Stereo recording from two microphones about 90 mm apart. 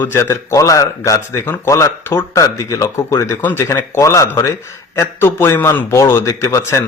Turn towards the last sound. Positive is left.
turn(degrees=35)  # may be behind; listen again after turning